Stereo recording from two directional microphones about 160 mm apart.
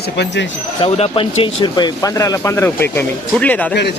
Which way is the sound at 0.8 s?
35° left (ahead or behind).